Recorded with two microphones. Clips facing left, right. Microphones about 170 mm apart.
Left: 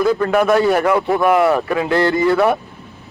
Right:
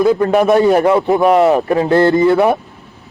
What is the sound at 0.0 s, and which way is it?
A man's voice, 20° right (ahead or behind).